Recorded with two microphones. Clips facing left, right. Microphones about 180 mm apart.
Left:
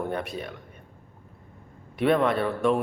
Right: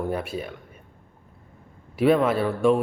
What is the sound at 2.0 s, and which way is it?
Speech, 5° right (ahead or behind).